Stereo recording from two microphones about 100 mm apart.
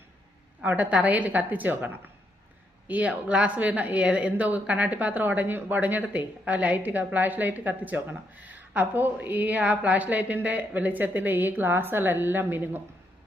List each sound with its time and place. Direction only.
0.6 s a woman's voice: 15° right (ahead or behind)